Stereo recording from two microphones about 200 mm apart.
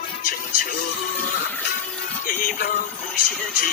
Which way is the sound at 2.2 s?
45° left (ahead or behind).